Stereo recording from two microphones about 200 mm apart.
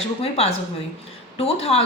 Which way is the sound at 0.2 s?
30° left (ahead or behind).